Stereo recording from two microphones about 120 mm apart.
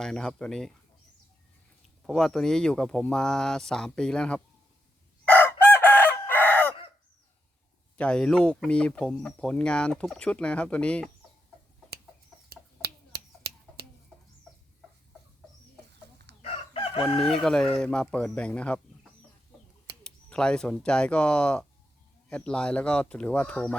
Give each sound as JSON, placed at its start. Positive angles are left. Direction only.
{"t": 0.0, "sound": "speech", "side_deg": 5}
{"t": 2.0, "sound": "speech", "side_deg": 5}
{"t": 5.2, "sound": "chicken", "side_deg": 15}
{"t": 7.9, "sound": "speech", "side_deg": 10}
{"t": 16.4, "sound": "chicken", "side_deg": 50}
{"t": 17.4, "sound": "speech", "side_deg": 5}
{"t": 20.1, "sound": "speech", "side_deg": 10}